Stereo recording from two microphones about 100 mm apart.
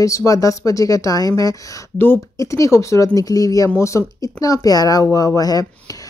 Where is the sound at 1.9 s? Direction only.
20° left (ahead or behind).